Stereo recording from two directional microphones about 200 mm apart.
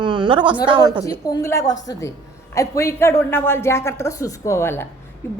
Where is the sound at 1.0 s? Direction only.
15° left (ahead or behind).